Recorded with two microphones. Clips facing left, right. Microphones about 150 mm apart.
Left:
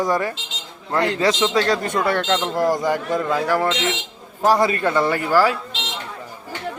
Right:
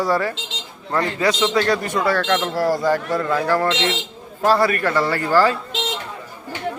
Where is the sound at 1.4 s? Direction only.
20° left (ahead or behind).